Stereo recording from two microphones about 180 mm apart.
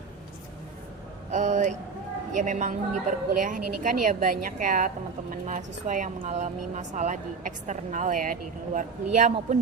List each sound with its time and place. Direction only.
1.3 s a woman's voice: 40° right (ahead or behind)